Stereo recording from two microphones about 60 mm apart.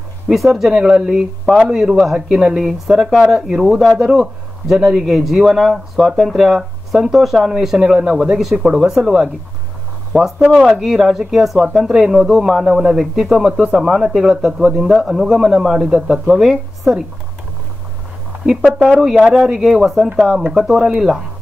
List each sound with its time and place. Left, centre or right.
0.3 s speech: centre
18.9 s speech: centre